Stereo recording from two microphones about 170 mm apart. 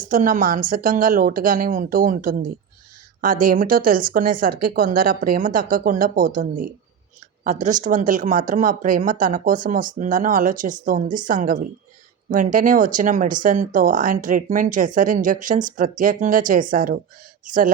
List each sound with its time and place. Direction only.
0.1 s a woman's voice: 50° right (ahead or behind)